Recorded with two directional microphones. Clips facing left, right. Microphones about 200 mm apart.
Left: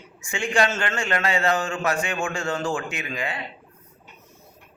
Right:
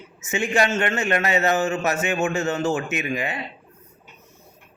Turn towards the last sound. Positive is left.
turn(degrees=-20)  # may be behind; listen again after turning